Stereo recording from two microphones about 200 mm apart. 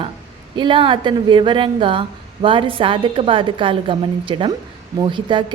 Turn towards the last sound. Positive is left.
turn(degrees=-25)  # may be behind; listen again after turning